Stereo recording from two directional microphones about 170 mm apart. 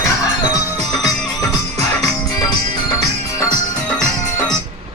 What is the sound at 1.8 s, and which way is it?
Music, 20° left (ahead or behind).